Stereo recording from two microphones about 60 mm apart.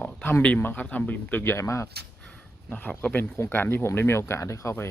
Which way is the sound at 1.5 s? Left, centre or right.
Left.